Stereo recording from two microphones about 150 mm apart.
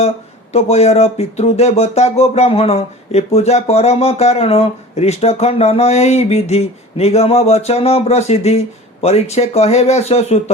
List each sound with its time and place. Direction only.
0.5 s speech: 45° left (ahead or behind)